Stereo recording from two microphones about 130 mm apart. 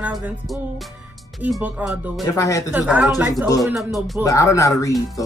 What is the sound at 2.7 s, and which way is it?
Speech, 10° right (ahead or behind).